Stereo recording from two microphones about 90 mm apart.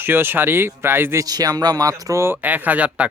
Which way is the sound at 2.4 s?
20° right (ahead or behind).